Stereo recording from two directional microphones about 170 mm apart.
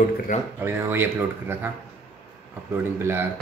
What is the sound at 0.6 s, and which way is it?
Speech, 10° right (ahead or behind).